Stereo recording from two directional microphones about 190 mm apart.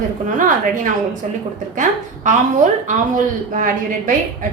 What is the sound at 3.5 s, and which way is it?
Speech, 45° right (ahead or behind).